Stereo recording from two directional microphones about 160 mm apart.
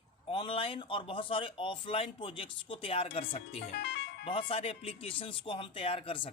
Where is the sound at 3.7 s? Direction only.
90° left.